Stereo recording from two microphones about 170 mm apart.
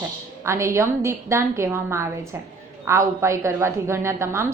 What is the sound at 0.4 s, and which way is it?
A woman's voice, 15° right (ahead or behind).